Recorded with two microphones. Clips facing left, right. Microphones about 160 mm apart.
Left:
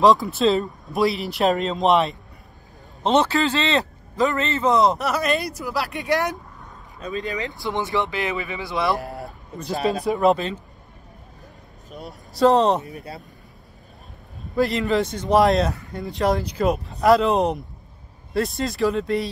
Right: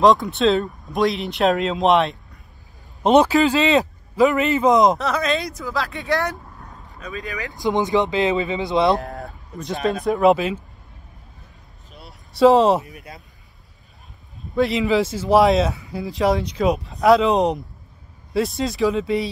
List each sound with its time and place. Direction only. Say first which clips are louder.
0.0 s speech: right 1 dB; centre (ahead or behind)
3.0 s a man's voice: right 5 dB; 15° right (ahead or behind)
5.0 s speech: right 1 dB; 5° left (ahead or behind); by 7.5 s 20° left (ahead or behind)
7.5 s speech: right 8 dB; 15° right (ahead or behind)
9.0 s a sound: right 1 dB; 5° left (ahead or behind)
10.0 s speech: right 4 dB; centre (ahead or behind)
11.9 s vehicle: left 7 dB; 45° left (ahead or behind)
12.4 s speech: right 3 dB; centre (ahead or behind)
12.8 s speech: left 5 dB; 35° left (ahead or behind)
14.5 s speech: right 2 dB; centre (ahead or behind)